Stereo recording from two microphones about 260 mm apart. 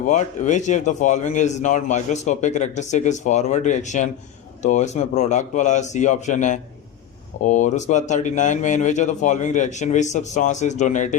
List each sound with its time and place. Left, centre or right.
0.0 s a man's voice: left